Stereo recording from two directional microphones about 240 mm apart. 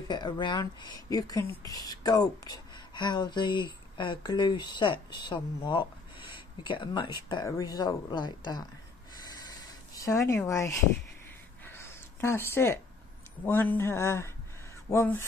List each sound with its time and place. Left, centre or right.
0.1 s speech: centre
9.9 s speech: centre
11.6 s a sound: centre
13.5 s speech: centre